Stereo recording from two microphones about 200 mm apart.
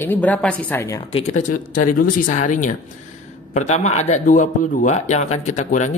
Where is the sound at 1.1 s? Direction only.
35° left (ahead or behind).